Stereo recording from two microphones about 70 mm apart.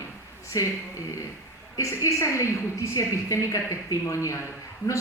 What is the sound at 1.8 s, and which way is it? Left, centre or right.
Speech, left.